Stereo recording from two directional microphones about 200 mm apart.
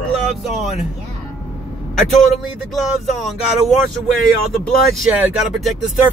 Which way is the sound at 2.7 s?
Centre (ahead or behind).